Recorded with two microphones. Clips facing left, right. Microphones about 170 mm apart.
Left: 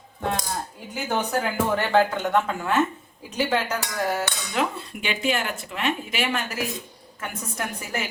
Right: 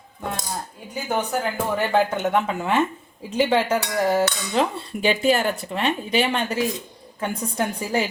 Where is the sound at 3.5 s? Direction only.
30° right (ahead or behind).